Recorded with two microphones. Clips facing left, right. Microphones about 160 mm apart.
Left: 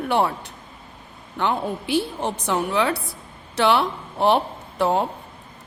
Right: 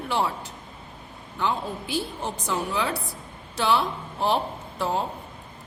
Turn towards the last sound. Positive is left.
turn(degrees=65)  # may be behind; listen again after turning